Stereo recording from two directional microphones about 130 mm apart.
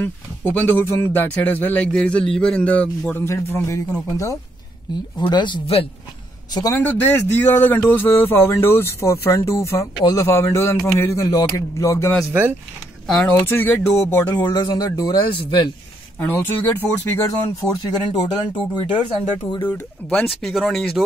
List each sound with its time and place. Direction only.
0.0 s speech: 15° left (ahead or behind)
4.9 s speech: 35° left (ahead or behind)
6.7 s speech: 15° left (ahead or behind)
12.3 s speech: 15° right (ahead or behind)
13.0 s speech: 5° left (ahead or behind)
13.5 s speech: 15° left (ahead or behind)
14.3 s speech: 30° left (ahead or behind)
16.2 s speech: 15° left (ahead or behind)
17.8 s speech: 30° left (ahead or behind)
19.6 s speech: 10° left (ahead or behind)